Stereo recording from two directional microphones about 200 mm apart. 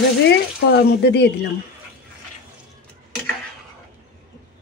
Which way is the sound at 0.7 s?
55° left (ahead or behind).